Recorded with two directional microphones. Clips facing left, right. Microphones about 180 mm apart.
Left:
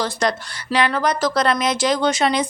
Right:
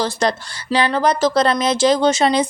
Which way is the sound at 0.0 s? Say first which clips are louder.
Right 2 dB; 30° right (ahead or behind).